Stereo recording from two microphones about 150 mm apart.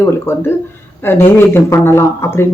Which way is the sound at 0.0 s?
15° left (ahead or behind).